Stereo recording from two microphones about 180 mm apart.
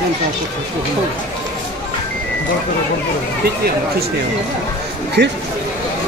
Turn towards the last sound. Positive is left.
turn(degrees=-70)  # may be behind; listen again after turning